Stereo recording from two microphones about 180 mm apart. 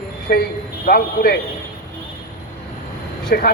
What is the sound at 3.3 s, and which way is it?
Speech, 55° left (ahead or behind).